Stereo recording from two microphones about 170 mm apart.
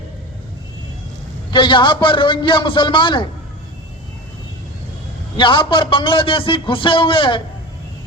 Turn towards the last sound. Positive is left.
turn(degrees=30)  # may be behind; listen again after turning